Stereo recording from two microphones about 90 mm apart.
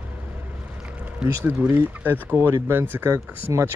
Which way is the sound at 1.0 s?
20° right (ahead or behind).